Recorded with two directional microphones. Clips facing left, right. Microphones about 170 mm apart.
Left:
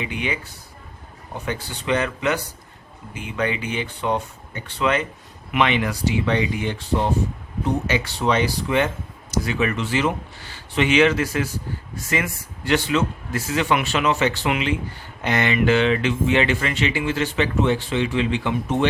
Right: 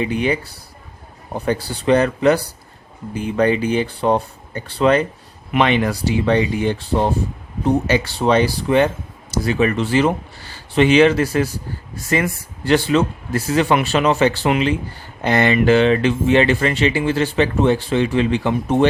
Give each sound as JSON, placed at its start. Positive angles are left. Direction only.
{"t": 0.0, "sound": "speech", "side_deg": -40}